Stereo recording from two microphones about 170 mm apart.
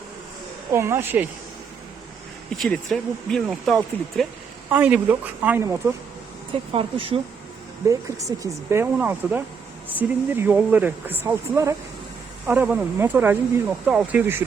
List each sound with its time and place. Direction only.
0.7 s speech: 15° right (ahead or behind)
2.6 s speech: 5° left (ahead or behind)
4.7 s speech: 10° right (ahead or behind)
6.5 s speech: 30° right (ahead or behind)
7.9 s speech: 20° right (ahead or behind)